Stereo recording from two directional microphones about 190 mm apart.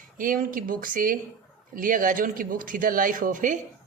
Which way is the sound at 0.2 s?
45° right (ahead or behind).